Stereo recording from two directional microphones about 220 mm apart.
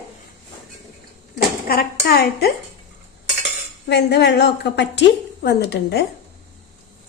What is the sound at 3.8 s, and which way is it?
A woman's voice, 50° left (ahead or behind).